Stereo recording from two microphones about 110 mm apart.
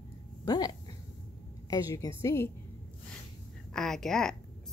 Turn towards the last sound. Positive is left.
turn(degrees=5)  # may be behind; listen again after turning